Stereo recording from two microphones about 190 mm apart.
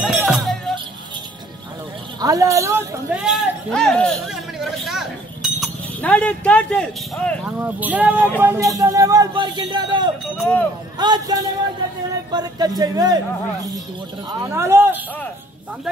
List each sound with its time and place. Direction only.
0.0 s music: 5° right (ahead or behind)
2.1 s speech: 20° right (ahead or behind)
3.2 s a man's voice: centre (ahead or behind)
7.4 s speech: 10° right (ahead or behind)
10.4 s speech: 5° left (ahead or behind)
11.0 s speech: 20° right (ahead or behind)
14.3 s speech: 15° right (ahead or behind)